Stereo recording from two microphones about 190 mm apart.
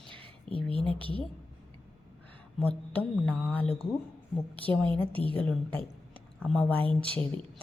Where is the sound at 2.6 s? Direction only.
5° left (ahead or behind).